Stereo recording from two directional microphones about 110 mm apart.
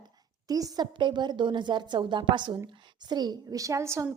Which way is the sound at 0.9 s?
45° right (ahead or behind).